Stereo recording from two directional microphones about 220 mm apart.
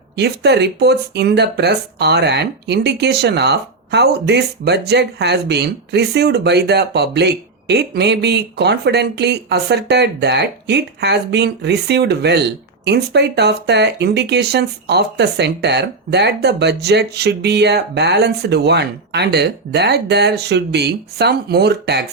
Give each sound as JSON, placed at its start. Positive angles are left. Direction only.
{"t": 0.2, "sound": "speech", "side_deg": -50}